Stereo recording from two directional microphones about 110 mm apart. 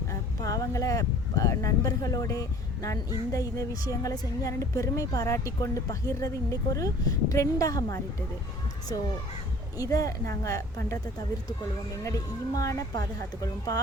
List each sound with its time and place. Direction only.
0.4 s speech: 30° left (ahead or behind)
9.7 s speech: 35° left (ahead or behind)
12.5 s speech: 30° left (ahead or behind)